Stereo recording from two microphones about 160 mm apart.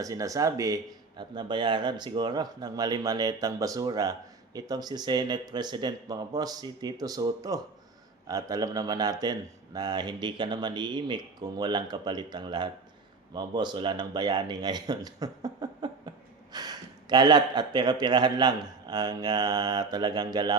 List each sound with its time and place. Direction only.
0.0 s speech: 20° right (ahead or behind)